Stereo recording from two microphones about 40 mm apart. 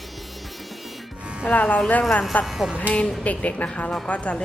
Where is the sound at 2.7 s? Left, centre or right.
Left.